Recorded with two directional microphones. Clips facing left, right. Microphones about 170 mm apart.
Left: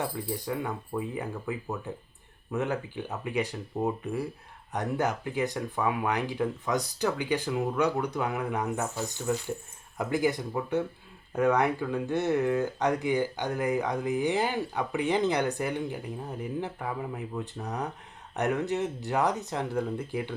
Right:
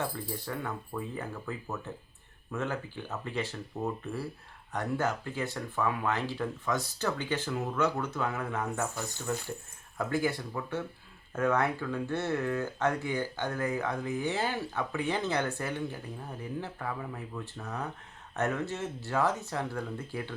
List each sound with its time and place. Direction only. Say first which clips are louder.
0.4 s speech: left 4 dB; 15° left (ahead or behind)